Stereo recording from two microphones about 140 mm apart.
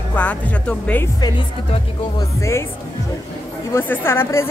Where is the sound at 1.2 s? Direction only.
30° left (ahead or behind).